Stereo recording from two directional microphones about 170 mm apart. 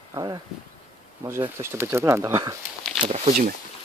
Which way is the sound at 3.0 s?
40° right (ahead or behind).